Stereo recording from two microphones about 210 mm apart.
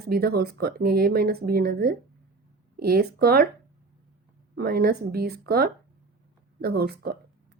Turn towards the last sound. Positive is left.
turn(degrees=-50)  # may be behind; listen again after turning